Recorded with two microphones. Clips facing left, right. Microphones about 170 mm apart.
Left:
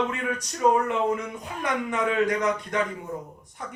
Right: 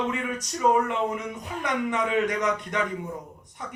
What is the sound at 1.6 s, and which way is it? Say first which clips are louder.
Speech: left 1 dB; 20° right (ahead or behind).